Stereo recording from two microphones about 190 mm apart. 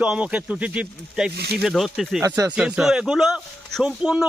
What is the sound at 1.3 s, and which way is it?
Speech, 60° right (ahead or behind).